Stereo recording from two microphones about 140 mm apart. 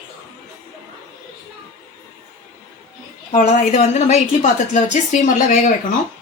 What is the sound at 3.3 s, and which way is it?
A woman's voice, 60° left (ahead or behind).